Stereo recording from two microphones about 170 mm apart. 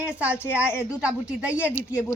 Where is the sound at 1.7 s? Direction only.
15° left (ahead or behind).